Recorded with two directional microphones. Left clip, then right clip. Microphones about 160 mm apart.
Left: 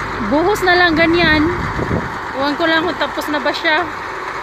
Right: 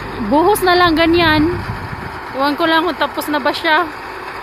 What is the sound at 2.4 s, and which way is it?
Speech, 20° right (ahead or behind).